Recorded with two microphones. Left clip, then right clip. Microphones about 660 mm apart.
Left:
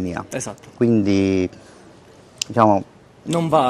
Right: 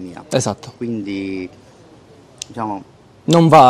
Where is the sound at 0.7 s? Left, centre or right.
Left.